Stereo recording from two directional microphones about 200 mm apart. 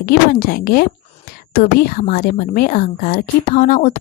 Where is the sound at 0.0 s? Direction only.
50° left (ahead or behind).